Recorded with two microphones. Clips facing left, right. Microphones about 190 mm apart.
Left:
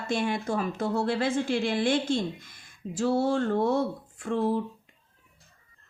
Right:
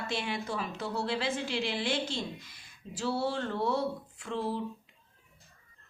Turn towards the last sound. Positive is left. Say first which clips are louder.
# left 7 dB
turn(degrees=50)  # may be behind; listen again after turning